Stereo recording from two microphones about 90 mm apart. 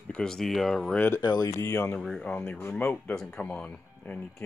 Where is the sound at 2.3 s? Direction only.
20° left (ahead or behind).